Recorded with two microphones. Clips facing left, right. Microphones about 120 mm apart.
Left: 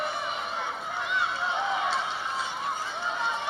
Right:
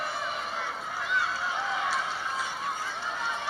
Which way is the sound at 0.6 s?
25° left (ahead or behind).